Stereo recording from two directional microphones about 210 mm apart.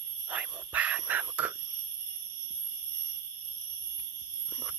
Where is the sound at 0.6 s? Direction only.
10° right (ahead or behind).